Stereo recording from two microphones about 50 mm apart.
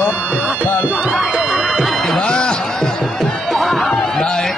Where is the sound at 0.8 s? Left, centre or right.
Right.